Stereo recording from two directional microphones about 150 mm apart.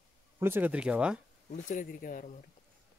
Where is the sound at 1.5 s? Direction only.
60° left (ahead or behind).